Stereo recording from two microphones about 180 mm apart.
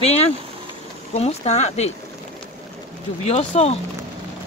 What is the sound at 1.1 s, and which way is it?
Speech, 35° left (ahead or behind).